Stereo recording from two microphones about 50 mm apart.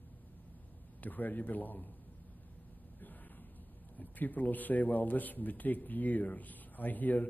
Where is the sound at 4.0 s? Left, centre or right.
Left.